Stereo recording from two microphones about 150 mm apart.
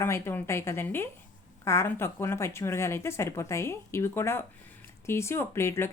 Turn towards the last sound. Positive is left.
turn(degrees=15)  # may be behind; listen again after turning